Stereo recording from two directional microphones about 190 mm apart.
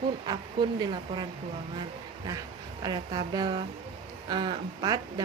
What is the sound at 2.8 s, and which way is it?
Speech, 20° right (ahead or behind).